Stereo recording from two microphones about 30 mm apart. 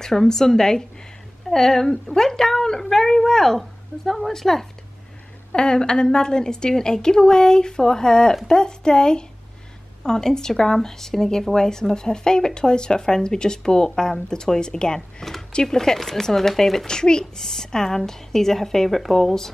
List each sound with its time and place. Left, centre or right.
0.0 s a woman's voice: centre
5.5 s a woman's voice: left; by 16.8 s centre
16.8 s a woman's voice: left